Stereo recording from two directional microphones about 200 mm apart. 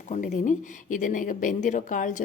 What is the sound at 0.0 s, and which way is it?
A woman's voice, 40° left (ahead or behind).